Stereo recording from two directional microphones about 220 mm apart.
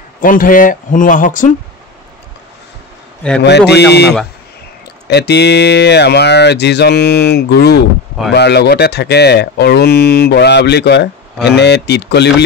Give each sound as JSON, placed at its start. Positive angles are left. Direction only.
{"t": 0.2, "sound": "speech", "side_deg": 40}
{"t": 3.4, "sound": "speech", "side_deg": 50}
{"t": 5.1, "sound": "speech", "side_deg": 50}